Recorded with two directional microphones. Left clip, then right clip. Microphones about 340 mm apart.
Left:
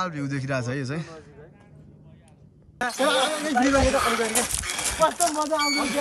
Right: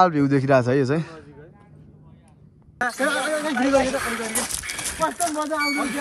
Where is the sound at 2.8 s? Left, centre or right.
Centre.